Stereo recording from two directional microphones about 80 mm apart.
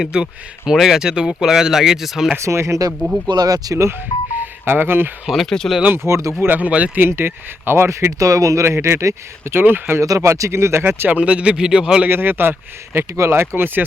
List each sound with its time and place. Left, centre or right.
0.1 s speech: centre
2.4 s speech: right
3.2 s speech: right
4.4 s speech: right
5.2 s speech: centre
6.1 s speech: right
6.4 s speech: right
8.2 s speech: right
10.0 s speech: right
11.2 s speech: centre
12.0 s speech: right